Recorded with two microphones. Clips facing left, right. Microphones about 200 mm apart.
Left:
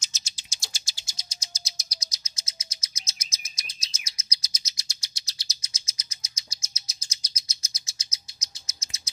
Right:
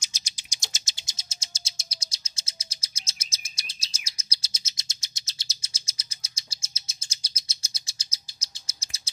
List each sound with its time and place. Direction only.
0.0 s bird: 15° right (ahead or behind); by 9.1 s 30° right (ahead or behind)